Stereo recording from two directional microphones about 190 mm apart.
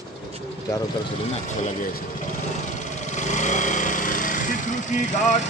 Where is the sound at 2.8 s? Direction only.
40° left (ahead or behind).